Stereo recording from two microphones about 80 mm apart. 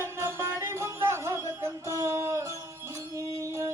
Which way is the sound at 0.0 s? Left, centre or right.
Right.